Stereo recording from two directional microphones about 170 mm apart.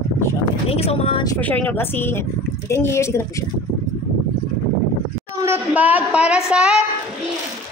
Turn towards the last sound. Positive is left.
turn(degrees=-5)  # may be behind; listen again after turning